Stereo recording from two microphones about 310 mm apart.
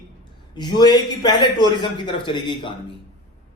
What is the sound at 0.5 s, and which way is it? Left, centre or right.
A man's voice, centre.